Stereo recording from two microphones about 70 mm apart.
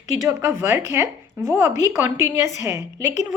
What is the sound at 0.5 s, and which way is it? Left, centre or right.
A woman's voice, right.